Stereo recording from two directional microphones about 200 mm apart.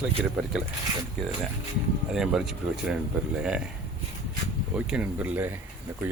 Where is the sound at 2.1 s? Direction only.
Centre (ahead or behind).